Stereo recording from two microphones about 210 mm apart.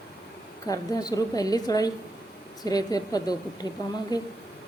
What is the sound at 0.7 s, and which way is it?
A woman's voice, 15° left (ahead or behind).